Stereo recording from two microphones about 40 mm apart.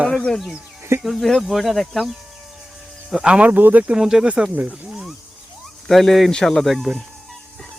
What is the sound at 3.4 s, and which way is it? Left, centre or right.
Speech, right.